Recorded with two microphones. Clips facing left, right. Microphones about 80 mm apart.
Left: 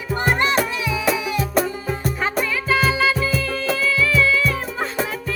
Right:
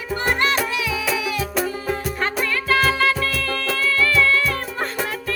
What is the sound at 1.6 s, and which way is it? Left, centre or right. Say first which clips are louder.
Music: even; centre.